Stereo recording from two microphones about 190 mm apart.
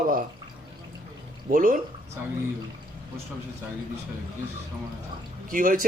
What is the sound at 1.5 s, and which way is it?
Speech, 45° right (ahead or behind).